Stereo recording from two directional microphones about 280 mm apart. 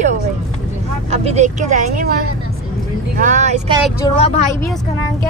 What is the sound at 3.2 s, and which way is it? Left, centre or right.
Speech, right.